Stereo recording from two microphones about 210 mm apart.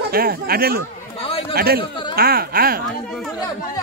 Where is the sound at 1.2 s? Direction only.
25° left (ahead or behind).